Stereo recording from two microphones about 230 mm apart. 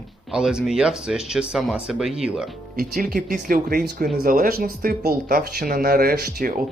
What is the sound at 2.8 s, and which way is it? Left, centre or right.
Speech, right.